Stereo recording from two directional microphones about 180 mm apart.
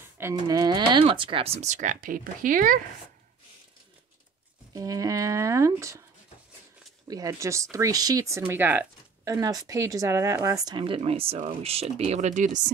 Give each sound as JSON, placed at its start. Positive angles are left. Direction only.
{"t": 0.2, "sound": "speech", "side_deg": -20}
{"t": 4.7, "sound": "speech", "side_deg": -20}
{"t": 7.1, "sound": "speech", "side_deg": -20}